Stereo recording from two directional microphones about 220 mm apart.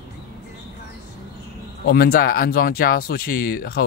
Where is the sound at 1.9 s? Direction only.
45° left (ahead or behind).